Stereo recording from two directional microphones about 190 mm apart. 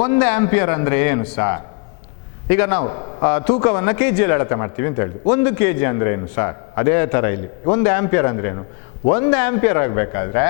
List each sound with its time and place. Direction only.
0.0 s a man's voice: 10° left (ahead or behind)
2.8 s a man's voice: 25° left (ahead or behind)
3.2 s a man's voice: 15° left (ahead or behind)